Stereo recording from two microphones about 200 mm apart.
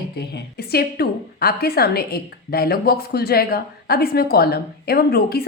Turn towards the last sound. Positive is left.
turn(degrees=50)  # may be behind; listen again after turning